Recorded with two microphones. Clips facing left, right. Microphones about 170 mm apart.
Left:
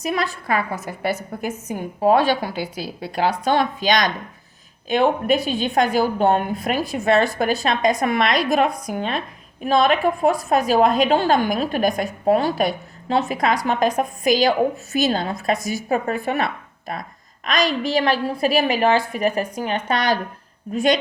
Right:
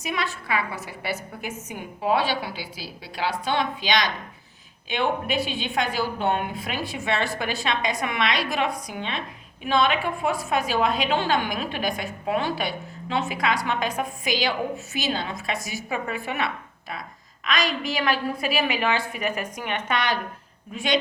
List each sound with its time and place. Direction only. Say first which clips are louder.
0.0 s a woman's voice: left 6 dB; 40° left (ahead or behind)